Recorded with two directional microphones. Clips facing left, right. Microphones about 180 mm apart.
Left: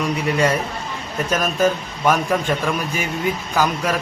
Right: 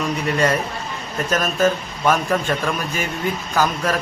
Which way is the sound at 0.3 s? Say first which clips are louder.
Even; 10° left (ahead or behind).